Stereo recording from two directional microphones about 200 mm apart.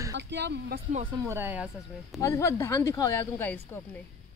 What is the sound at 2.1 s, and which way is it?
Speech, 15° left (ahead or behind).